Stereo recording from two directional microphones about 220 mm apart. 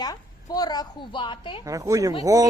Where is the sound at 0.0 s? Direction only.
15° left (ahead or behind).